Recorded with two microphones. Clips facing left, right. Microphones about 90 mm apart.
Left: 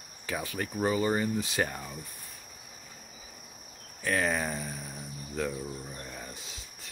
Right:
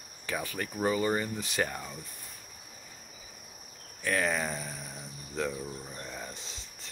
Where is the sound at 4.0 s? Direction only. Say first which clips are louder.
Left 1 dB; 15° left (ahead or behind).